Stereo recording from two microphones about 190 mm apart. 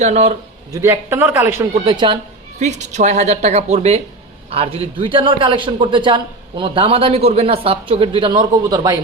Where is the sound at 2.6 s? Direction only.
35° right (ahead or behind).